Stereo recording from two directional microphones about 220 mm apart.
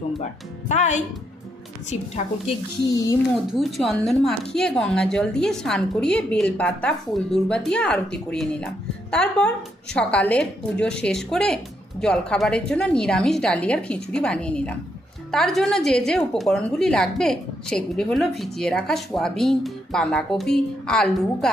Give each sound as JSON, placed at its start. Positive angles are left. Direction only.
{"t": 0.7, "sound": "a woman's voice", "side_deg": 30}
{"t": 2.9, "sound": "speech", "side_deg": 15}
{"t": 3.6, "sound": "speech", "side_deg": 0}